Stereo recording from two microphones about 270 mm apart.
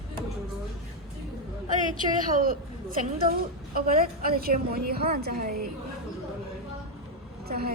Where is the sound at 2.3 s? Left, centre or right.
Right.